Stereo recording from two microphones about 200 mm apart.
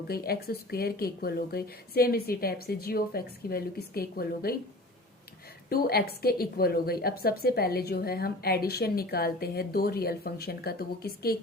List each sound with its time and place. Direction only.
0.1 s a woman's voice: 50° left (ahead or behind)
5.6 s a woman's voice: 50° left (ahead or behind)